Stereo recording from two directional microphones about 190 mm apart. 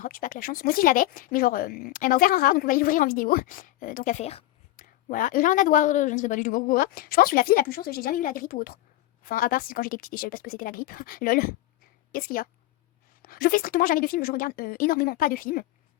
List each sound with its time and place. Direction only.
0.0 s speech: 45° left (ahead or behind)
4.8 s speech: 45° left (ahead or behind)